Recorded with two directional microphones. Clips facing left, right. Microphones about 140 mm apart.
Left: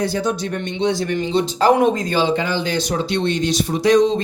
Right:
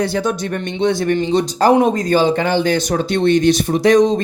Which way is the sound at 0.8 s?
55° right (ahead or behind).